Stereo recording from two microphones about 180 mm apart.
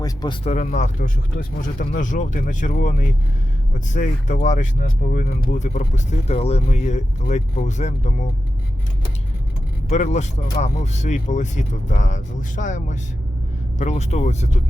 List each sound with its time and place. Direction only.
0.0 s speech: 20° left (ahead or behind)
0.4 s speech: 40° left (ahead or behind)
9.9 s speech: 40° left (ahead or behind)